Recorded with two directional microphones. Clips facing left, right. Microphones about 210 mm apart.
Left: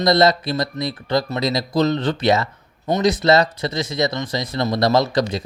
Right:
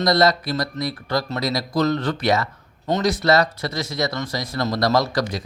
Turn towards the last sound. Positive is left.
turn(degrees=25)  # may be behind; listen again after turning